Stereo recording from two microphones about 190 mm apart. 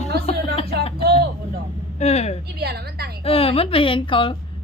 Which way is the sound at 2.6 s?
55° right (ahead or behind).